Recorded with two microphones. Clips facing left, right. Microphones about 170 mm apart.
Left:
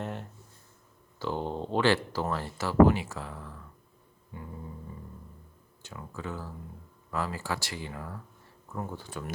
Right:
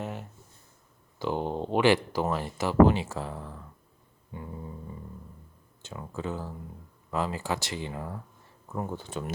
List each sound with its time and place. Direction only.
0.0 s a sound: 5° right (ahead or behind)
1.2 s speech: 15° right (ahead or behind)
4.3 s guitar: 20° right (ahead or behind)
5.8 s speech: 25° right (ahead or behind)